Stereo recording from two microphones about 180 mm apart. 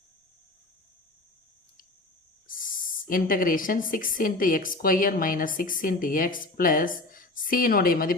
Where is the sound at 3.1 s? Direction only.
50° left (ahead or behind).